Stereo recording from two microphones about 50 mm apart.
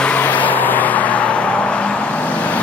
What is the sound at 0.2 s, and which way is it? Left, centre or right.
Vehicle, left.